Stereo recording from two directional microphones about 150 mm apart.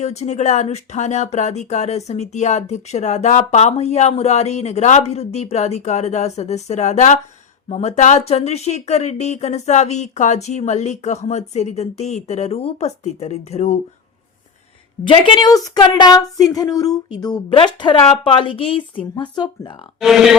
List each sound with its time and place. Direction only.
0.0 s speech: 50° left (ahead or behind)
15.0 s a woman's voice: 35° left (ahead or behind)
20.0 s speech: centre (ahead or behind)